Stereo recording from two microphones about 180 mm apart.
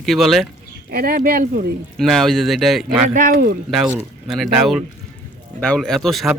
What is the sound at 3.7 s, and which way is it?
Speech, 5° right (ahead or behind).